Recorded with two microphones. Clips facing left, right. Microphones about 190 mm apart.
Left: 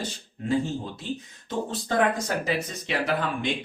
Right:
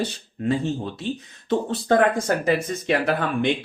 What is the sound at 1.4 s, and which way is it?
Speech, 60° right (ahead or behind).